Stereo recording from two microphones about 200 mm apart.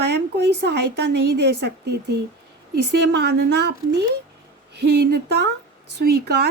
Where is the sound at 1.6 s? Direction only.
55° right (ahead or behind).